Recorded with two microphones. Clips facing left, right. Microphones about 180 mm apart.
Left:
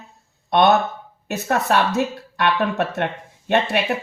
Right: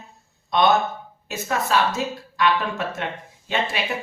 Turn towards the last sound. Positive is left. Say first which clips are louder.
# left 6 dB
turn(degrees=60)  # may be behind; listen again after turning